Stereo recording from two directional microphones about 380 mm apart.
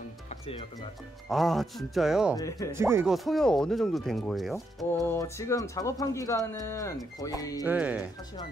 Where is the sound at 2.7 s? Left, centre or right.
Centre.